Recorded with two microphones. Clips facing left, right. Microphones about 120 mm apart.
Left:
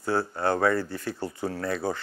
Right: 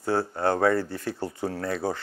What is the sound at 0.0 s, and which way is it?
Speech, 35° right (ahead or behind).